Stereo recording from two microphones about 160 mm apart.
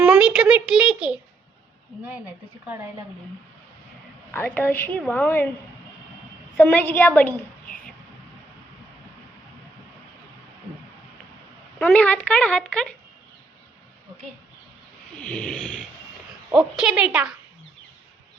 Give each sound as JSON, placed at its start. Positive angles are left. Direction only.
{"t": 0.0, "sound": "a child's voice", "side_deg": -5}
{"t": 4.3, "sound": "a woman's voice", "side_deg": 10}
{"t": 6.6, "sound": "a woman's voice", "side_deg": 10}
{"t": 11.8, "sound": "a woman's voice", "side_deg": 10}
{"t": 15.2, "sound": "a woman's voice", "side_deg": 5}